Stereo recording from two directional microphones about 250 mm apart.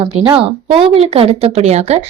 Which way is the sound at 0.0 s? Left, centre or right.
Right.